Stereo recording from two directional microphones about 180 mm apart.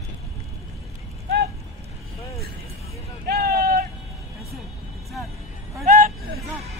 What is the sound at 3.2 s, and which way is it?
Vehicle, 60° right (ahead or behind).